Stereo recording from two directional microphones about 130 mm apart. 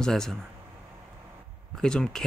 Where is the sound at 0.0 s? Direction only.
5° left (ahead or behind).